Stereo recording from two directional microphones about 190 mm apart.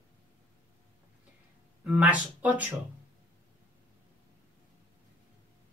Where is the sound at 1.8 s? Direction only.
5° right (ahead or behind).